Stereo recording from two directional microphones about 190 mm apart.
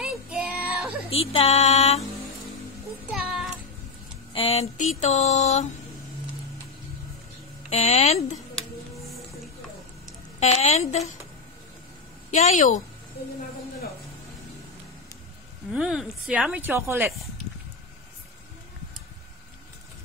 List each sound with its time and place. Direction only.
0.0 s child singing: 5° right (ahead or behind)
1.1 s mantra: 30° left (ahead or behind)
4.3 s mantra: 30° left (ahead or behind)
7.7 s mantra: 35° left (ahead or behind)
10.4 s mantra: 35° left (ahead or behind)
12.3 s a woman's voice: 40° left (ahead or behind)
15.7 s speech: 5° right (ahead or behind)